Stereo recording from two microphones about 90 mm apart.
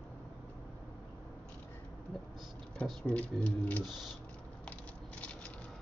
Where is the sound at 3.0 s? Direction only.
15° left (ahead or behind).